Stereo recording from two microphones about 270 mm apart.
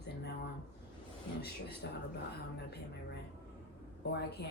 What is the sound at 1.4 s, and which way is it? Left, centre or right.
Speech, left.